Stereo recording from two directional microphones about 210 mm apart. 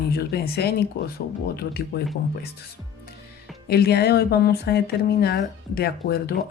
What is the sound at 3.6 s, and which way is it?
Speech, 50° left (ahead or behind).